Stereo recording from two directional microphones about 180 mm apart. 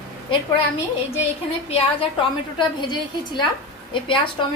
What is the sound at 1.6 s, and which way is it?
A woman's voice, 35° left (ahead or behind).